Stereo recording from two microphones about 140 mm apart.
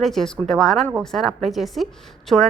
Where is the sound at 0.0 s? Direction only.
Centre (ahead or behind).